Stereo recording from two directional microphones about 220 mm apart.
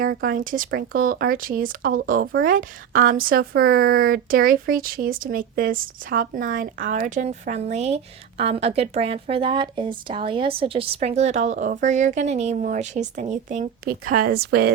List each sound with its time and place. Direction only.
0.0 s speech: 40° right (ahead or behind)